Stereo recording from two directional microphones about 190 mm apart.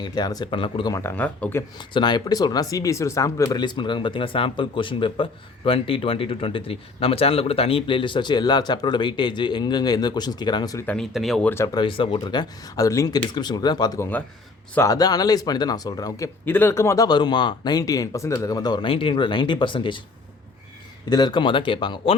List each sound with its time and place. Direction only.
0.0 s speech: 20° left (ahead or behind)
1.9 s speech: 25° left (ahead or behind)
10.9 s speech: centre (ahead or behind)
11.5 s speech: 20° left (ahead or behind)
21.1 s speech: 20° left (ahead or behind)